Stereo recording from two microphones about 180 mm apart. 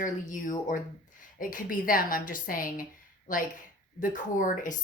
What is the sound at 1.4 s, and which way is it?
Speech, 50° left (ahead or behind).